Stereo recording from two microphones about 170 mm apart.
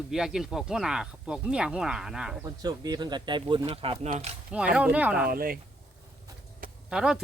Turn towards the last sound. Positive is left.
turn(degrees=-5)  # may be behind; listen again after turning